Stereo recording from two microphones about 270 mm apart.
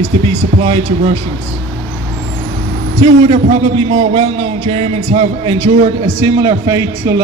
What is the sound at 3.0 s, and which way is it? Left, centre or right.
A man's voice, right.